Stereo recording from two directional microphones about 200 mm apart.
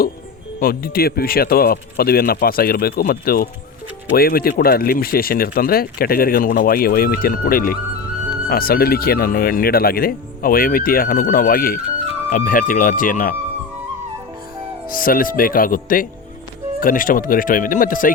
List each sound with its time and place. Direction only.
0.6 s speech: 50° left (ahead or behind)
14.8 s speech: 45° left (ahead or behind)